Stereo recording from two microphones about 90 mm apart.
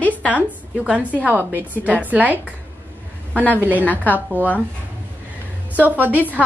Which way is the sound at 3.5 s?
20° right (ahead or behind).